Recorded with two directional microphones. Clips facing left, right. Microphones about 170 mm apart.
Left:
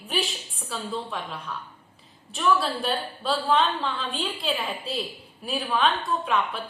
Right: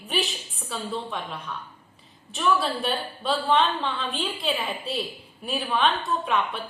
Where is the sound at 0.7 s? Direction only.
Centre (ahead or behind).